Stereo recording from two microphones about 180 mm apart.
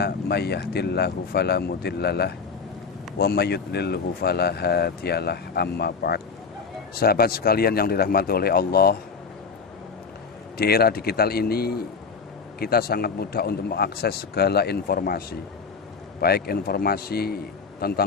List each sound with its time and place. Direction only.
0.0 s speech: 65° left (ahead or behind)
10.6 s speech: 60° left (ahead or behind)